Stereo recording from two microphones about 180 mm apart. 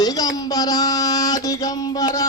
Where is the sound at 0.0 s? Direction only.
20° left (ahead or behind).